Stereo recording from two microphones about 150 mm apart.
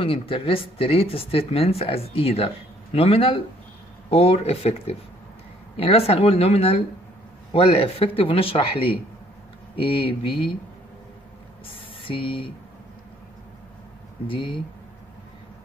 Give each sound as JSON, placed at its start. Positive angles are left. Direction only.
{"t": 0.0, "sound": "speech", "side_deg": 35}
{"t": 11.7, "sound": "speech", "side_deg": 35}
{"t": 14.2, "sound": "speech", "side_deg": 35}